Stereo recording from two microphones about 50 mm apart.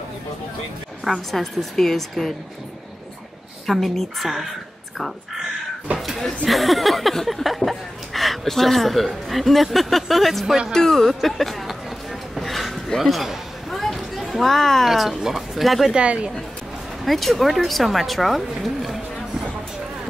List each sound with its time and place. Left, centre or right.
1.0 s speech: centre
3.6 s speech: centre
5.9 s a sound: centre
6.4 s speech: centre
10.4 s speech: centre
10.7 s a sound: centre
13.0 s speech: centre
15.9 s speech: right
17.0 s speech: centre